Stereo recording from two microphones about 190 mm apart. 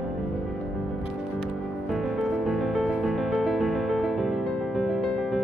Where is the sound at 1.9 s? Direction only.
Centre (ahead or behind).